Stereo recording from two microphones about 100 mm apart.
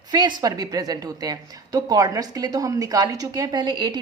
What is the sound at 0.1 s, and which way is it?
A woman's voice, 45° right (ahead or behind).